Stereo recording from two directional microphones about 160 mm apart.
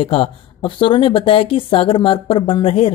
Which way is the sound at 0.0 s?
35° left (ahead or behind).